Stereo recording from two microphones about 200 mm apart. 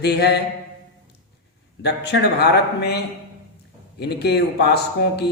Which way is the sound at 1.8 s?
55° left (ahead or behind).